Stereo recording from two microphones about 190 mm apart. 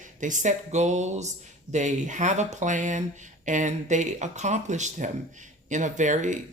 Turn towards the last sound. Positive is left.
turn(degrees=-40)  # may be behind; listen again after turning